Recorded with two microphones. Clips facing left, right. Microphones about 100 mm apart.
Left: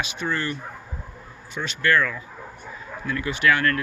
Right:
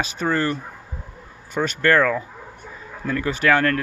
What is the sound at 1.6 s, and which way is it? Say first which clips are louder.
Speech: right 4 dB; 45° right (ahead or behind).